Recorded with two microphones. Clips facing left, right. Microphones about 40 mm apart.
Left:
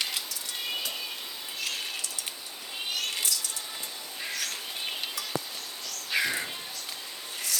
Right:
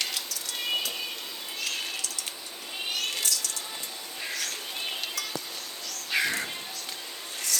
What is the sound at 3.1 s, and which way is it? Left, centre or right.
Cat, centre.